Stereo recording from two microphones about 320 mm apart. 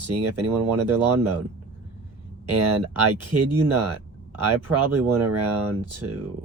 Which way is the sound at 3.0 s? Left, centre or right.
Right.